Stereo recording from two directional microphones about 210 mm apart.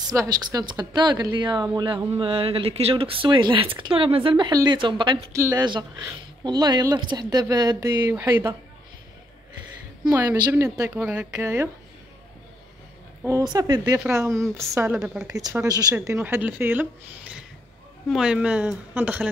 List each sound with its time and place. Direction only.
0.1 s speech: 15° right (ahead or behind)
10.1 s a woman's voice: 15° right (ahead or behind)
13.2 s a woman's voice: 15° right (ahead or behind)
18.1 s speech: 5° right (ahead or behind)